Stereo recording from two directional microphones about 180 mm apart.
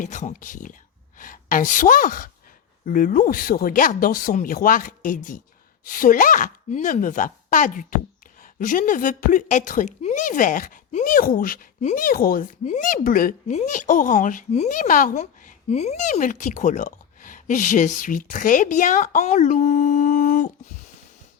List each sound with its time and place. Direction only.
0.0 s speech: 45° left (ahead or behind)